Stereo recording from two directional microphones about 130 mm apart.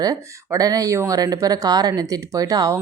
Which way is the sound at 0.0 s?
30° right (ahead or behind).